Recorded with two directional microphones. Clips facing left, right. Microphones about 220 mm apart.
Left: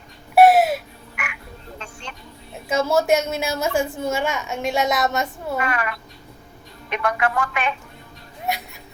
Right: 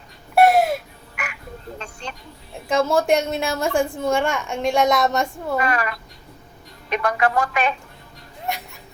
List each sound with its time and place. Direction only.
0.3 s a sound: centre (ahead or behind)
1.1 s frog: 35° right (ahead or behind)
1.8 s vehicle: 35° right (ahead or behind)
2.6 s a woman's voice: 5° left (ahead or behind)
5.5 s speech: 35° right (ahead or behind)